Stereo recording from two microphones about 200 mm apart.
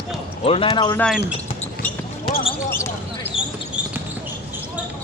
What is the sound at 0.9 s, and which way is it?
Speech, 5° left (ahead or behind).